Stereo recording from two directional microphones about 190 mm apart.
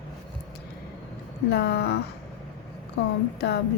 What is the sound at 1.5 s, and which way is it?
Speech, 60° left (ahead or behind).